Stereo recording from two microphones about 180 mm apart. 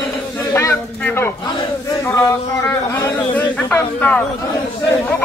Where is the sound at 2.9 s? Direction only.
10° left (ahead or behind).